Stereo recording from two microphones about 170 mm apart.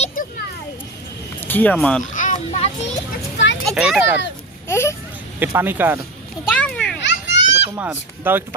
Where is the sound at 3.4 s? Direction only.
90° left.